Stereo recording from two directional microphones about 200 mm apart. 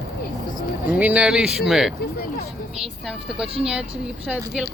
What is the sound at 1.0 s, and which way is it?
A woman's voice, 5° right (ahead or behind).